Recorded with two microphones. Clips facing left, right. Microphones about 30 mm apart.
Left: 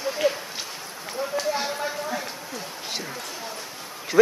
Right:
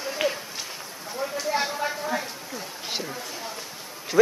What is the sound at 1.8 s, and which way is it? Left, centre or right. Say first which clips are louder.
Speech: right 1 dB; centre.